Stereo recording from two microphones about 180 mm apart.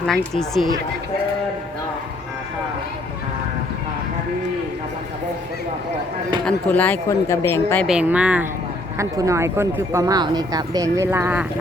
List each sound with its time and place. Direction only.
0.0 s speech: 5° left (ahead or behind)
6.4 s speech: 10° left (ahead or behind)
7.9 s speech: 5° right (ahead or behind)